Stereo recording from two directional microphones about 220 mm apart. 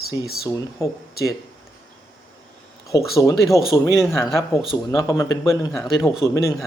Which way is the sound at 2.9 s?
15° left (ahead or behind).